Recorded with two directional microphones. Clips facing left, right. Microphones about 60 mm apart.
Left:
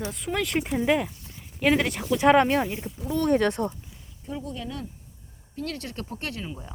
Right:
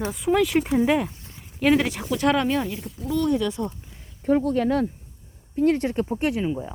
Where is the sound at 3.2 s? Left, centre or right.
Left.